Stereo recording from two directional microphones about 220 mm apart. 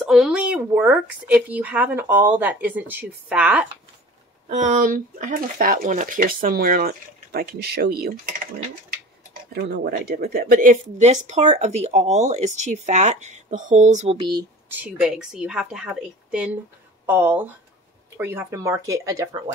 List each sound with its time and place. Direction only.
0.0 s speech: centre (ahead or behind)
4.5 s speech: 35° right (ahead or behind)
9.5 s speech: 45° right (ahead or behind); by 14.4 s 20° right (ahead or behind)
14.7 s a woman's voice: 5° right (ahead or behind)